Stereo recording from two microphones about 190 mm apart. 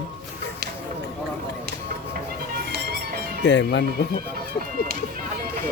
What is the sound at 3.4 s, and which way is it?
Speech, 70° left (ahead or behind).